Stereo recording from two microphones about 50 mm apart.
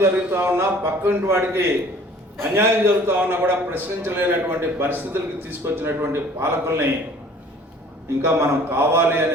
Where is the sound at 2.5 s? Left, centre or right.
Right.